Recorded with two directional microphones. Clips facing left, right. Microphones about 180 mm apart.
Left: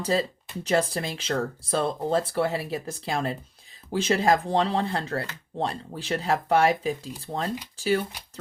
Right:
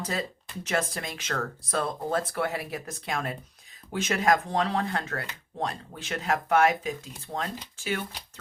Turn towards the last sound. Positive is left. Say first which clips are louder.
# left 7 dB
turn(degrees=35)  # may be behind; listen again after turning